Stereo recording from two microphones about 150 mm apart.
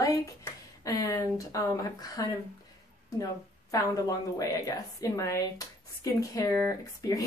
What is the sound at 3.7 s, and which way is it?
A woman's voice, 25° left (ahead or behind).